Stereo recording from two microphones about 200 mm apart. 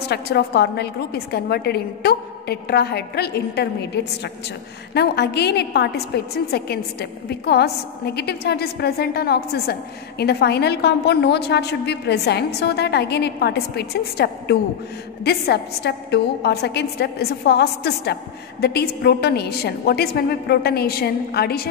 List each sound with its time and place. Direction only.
0.1 s a woman's voice: 55° left (ahead or behind)